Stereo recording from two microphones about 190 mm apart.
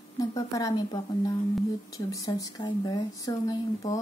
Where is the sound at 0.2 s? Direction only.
20° left (ahead or behind).